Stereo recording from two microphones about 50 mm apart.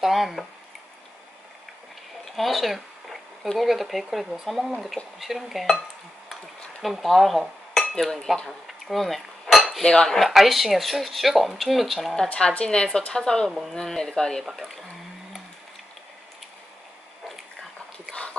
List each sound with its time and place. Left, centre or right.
0.0 s speech: centre
2.3 s a sound: centre
3.5 s speech: centre
6.8 s cutlery: centre
8.0 s speech: centre
8.6 s cutlery: centre
10.0 s speech: centre
12.3 s a woman's voice: left
14.5 s speech: centre